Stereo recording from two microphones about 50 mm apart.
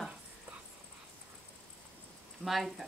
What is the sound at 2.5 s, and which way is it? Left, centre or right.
Speech, centre.